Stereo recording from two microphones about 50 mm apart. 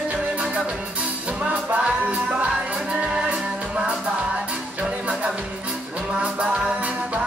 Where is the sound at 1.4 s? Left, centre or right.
Right.